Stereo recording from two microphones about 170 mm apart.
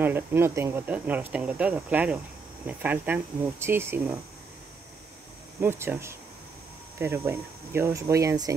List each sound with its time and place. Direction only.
0.0 s speech: 15° right (ahead or behind)
5.6 s speech: 15° right (ahead or behind)